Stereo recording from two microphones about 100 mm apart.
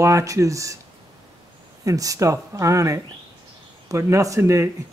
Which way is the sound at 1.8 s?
35° right (ahead or behind).